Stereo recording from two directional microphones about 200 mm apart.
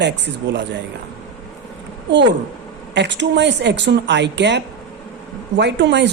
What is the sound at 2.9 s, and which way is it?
Speech, 60° right (ahead or behind).